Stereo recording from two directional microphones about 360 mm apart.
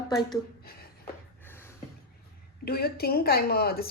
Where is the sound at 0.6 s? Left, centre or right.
Left.